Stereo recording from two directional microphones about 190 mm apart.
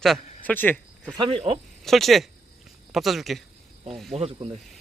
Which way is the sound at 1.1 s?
25° right (ahead or behind).